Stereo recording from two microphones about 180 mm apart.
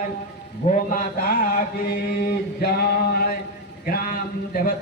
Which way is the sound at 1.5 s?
55° left (ahead or behind).